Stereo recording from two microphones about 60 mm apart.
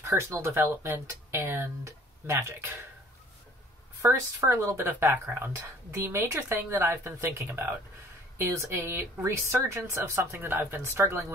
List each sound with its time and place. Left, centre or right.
0.0 s speech: right
4.0 s speech: right